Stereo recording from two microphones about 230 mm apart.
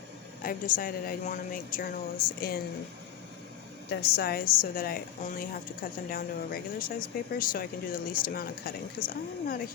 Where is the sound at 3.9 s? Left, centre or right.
Left.